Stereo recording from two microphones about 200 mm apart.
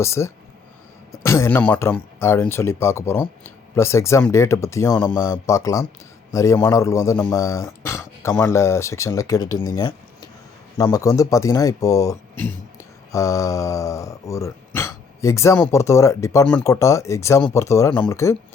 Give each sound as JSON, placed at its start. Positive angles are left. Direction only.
{"t": 0.0, "sound": "speech", "side_deg": 15}